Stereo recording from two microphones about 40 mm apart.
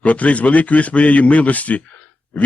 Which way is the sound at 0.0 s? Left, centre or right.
Left.